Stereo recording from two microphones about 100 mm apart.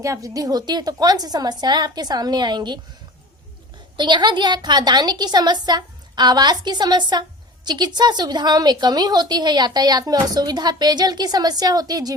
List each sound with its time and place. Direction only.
0.0 s a woman's voice: 35° right (ahead or behind)
3.9 s a woman's voice: 50° right (ahead or behind)